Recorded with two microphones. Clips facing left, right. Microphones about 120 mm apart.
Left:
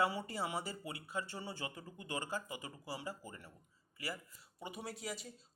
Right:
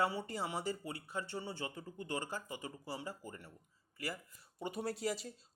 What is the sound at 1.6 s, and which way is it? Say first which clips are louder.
Speech: right 3 dB; 30° right (ahead or behind).